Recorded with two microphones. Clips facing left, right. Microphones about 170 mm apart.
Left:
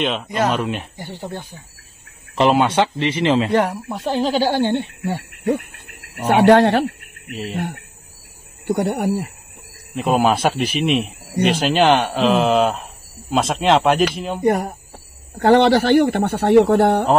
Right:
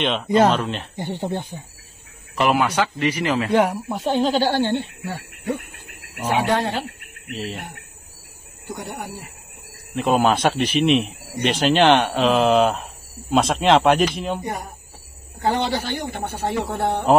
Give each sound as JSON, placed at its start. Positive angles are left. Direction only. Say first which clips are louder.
{"t": 0.0, "sound": "speech", "louder": "right 3 dB", "side_deg": 0}
{"t": 0.9, "sound": "speech", "louder": "right 4 dB", "side_deg": -20}
{"t": 2.3, "sound": "speech", "louder": "left 4 dB", "side_deg": 25}
{"t": 3.5, "sound": "speech", "louder": "even", "side_deg": 0}
{"t": 5.1, "sound": "speech", "louder": "left 6 dB", "side_deg": 30}
{"t": 6.2, "sound": "speech", "louder": "left 9 dB", "side_deg": 70}
{"t": 8.6, "sound": "speech", "louder": "left 12 dB", "side_deg": 70}
{"t": 9.9, "sound": "speech", "louder": "left 1 dB", "side_deg": 5}
{"t": 14.4, "sound": "speech", "louder": "left 12 dB", "side_deg": 70}